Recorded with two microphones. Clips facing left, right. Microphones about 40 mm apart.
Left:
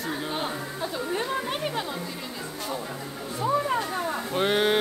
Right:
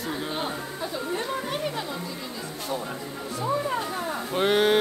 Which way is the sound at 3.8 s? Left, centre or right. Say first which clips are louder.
Left 1 dB; centre.